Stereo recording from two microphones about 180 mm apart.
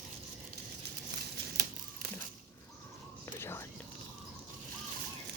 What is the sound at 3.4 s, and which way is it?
Whispering, 15° left (ahead or behind).